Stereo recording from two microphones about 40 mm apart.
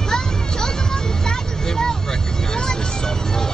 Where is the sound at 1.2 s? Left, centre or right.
Centre.